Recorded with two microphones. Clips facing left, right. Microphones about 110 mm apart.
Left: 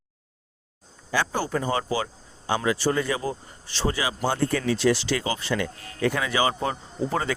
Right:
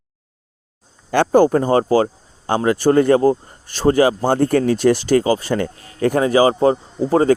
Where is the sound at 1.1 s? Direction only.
50° right (ahead or behind).